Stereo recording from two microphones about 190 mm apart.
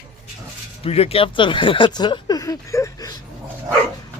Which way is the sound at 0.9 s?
30° left (ahead or behind).